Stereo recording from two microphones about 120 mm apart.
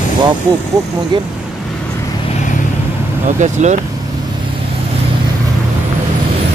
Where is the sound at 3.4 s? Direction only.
80° right.